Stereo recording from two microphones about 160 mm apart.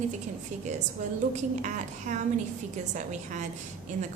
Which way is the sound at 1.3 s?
50° right (ahead or behind).